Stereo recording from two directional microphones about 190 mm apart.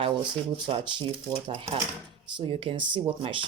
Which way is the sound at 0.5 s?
25° right (ahead or behind).